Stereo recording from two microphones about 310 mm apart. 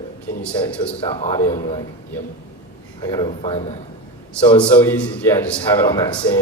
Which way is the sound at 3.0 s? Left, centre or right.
Centre.